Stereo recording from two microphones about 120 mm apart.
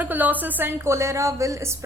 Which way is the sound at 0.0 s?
15° right (ahead or behind).